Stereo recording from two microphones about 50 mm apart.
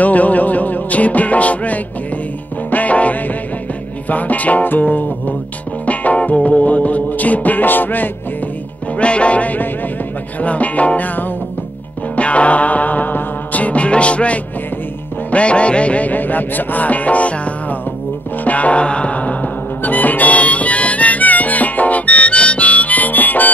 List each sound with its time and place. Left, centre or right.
0.0 s music: left
8.9 s music: left
12.2 s music: left